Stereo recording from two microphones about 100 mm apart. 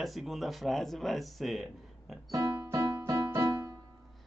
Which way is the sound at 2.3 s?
40° right (ahead or behind).